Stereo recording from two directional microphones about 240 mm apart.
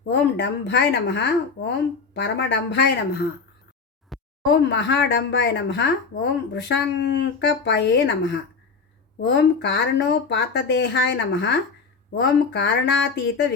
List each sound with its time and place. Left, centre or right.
0.1 s speech: left
4.1 s a sound: centre
4.4 s speech: left